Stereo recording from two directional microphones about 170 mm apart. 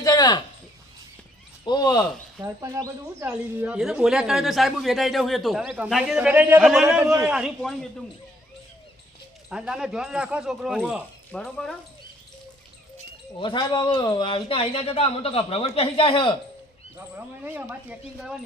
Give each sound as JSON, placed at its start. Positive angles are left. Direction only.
{"t": 0.0, "sound": "a sound", "side_deg": 25}
{"t": 1.6, "sound": "speech", "side_deg": 25}
{"t": 2.4, "sound": "speech", "side_deg": -15}
{"t": 7.0, "sound": "speech", "side_deg": -15}
{"t": 7.3, "sound": "speech", "side_deg": -5}
{"t": 9.5, "sound": "speech", "side_deg": -5}
{"t": 11.3, "sound": "speech", "side_deg": 5}
{"t": 13.4, "sound": "speech", "side_deg": 25}
{"t": 17.2, "sound": "speech", "side_deg": -10}